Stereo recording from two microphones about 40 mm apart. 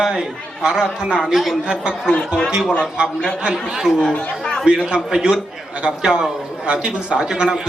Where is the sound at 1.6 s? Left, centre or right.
Right.